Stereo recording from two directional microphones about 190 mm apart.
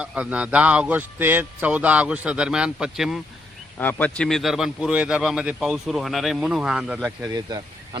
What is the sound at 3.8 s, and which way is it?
A man's voice, 10° left (ahead or behind).